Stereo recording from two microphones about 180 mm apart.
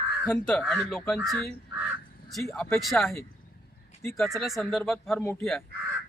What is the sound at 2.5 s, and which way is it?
Speech, 5° left (ahead or behind).